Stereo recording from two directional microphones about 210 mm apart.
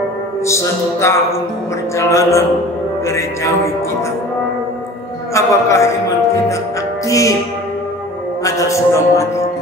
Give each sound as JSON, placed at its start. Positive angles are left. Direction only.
{"t": 0.5, "sound": "a man's voice", "side_deg": 15}
{"t": 5.3, "sound": "a man's voice", "side_deg": 15}
{"t": 7.1, "sound": "music", "side_deg": 15}
{"t": 8.5, "sound": "a man's voice", "side_deg": 15}